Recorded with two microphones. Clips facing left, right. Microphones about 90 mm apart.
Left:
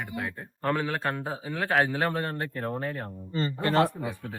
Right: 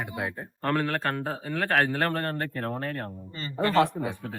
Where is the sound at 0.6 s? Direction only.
5° left (ahead or behind).